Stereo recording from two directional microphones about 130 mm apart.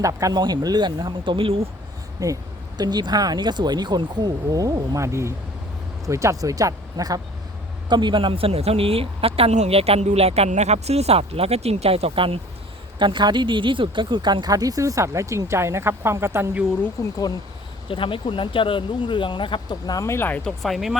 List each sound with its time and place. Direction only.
0.0 s speech: 25° right (ahead or behind); by 1.6 s 45° right (ahead or behind)
2.2 s speech: 25° right (ahead or behind)
17.0 s speech: 25° left (ahead or behind)
17.8 s speech: 40° left (ahead or behind)
20.0 s speech: 20° left (ahead or behind); by 20.9 s centre (ahead or behind)